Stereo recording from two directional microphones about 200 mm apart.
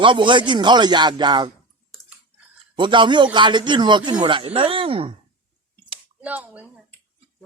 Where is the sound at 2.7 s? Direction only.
25° right (ahead or behind).